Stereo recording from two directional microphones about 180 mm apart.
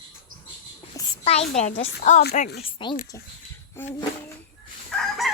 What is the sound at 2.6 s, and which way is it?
Speech, 25° left (ahead or behind).